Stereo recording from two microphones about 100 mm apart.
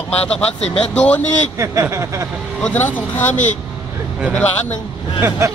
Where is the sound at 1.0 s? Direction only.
15° left (ahead or behind).